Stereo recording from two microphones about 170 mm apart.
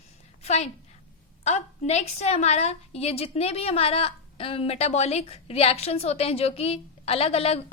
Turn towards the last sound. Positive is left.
turn(degrees=35)  # may be behind; listen again after turning